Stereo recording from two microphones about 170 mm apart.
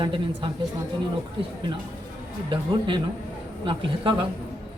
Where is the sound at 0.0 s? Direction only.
30° right (ahead or behind).